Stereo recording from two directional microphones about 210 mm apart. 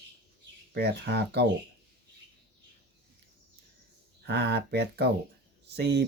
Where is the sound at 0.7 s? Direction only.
50° right (ahead or behind).